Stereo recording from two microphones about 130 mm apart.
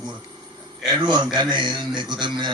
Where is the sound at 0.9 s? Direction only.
35° right (ahead or behind).